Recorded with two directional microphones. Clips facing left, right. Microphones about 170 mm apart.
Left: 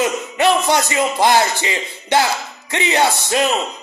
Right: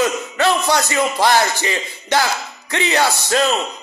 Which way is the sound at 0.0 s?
20° left (ahead or behind).